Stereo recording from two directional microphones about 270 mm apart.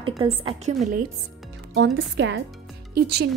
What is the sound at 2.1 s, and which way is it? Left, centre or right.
Speech, right.